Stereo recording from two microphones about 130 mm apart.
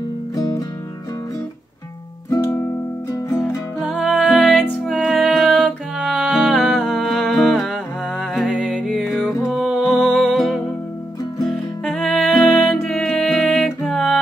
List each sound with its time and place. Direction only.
0.4 s music: 30° left (ahead or behind)
2.2 s music: 20° left (ahead or behind)
3.8 s music: 5° right (ahead or behind)
9.5 s music: 5° right (ahead or behind)